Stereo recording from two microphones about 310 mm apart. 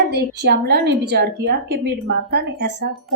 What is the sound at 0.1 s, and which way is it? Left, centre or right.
A woman's voice, right.